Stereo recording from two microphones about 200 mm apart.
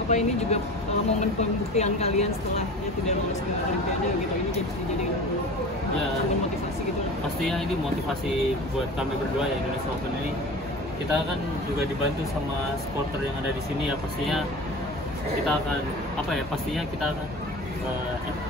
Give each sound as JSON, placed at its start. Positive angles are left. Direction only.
{"t": 0.1, "sound": "speech", "side_deg": 35}
{"t": 1.8, "sound": "speech", "side_deg": 35}
{"t": 13.8, "sound": "speech", "side_deg": 0}
{"t": 16.3, "sound": "speech", "side_deg": 0}